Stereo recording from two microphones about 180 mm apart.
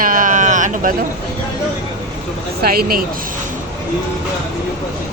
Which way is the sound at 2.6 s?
55° right (ahead or behind).